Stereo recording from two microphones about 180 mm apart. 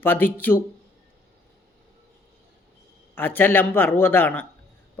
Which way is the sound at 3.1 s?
10° left (ahead or behind).